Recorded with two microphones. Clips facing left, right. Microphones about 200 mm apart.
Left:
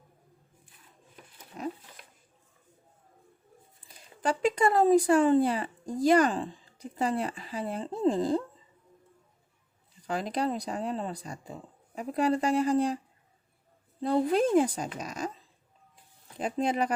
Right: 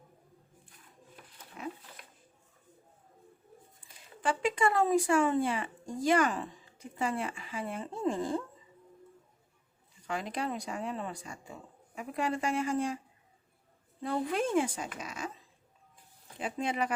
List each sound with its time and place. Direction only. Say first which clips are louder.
1.6 s dog: left 5 dB; 40° left (ahead or behind)
4.2 s speech: left 4 dB; 40° left (ahead or behind)
10.1 s speech: left 5 dB; 35° left (ahead or behind)
14.0 s speech: left 7 dB; 35° left (ahead or behind)
16.4 s speech: left 5 dB; 40° left (ahead or behind)